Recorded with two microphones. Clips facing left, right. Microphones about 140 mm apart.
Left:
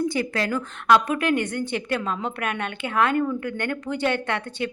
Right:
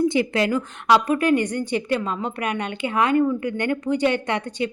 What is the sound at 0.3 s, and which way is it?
A woman's voice, 15° right (ahead or behind).